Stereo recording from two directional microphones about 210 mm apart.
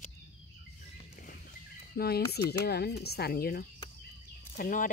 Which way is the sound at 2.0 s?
50° left (ahead or behind).